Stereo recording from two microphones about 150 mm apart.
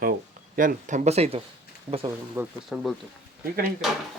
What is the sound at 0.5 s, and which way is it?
Speech, 65° right (ahead or behind).